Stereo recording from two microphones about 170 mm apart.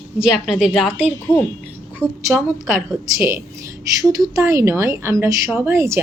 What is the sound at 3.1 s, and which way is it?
Speech, 15° right (ahead or behind).